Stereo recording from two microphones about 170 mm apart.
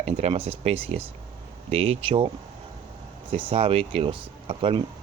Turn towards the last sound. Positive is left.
turn(degrees=-30)  # may be behind; listen again after turning